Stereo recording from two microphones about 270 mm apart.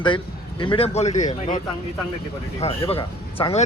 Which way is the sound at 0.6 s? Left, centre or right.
Centre.